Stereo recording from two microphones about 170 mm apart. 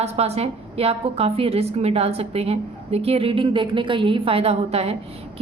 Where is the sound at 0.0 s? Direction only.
40° right (ahead or behind).